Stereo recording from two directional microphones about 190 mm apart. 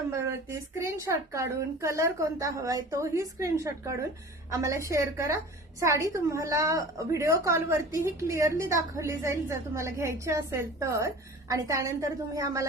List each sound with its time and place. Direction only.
0.8 s a woman's voice: 15° right (ahead or behind)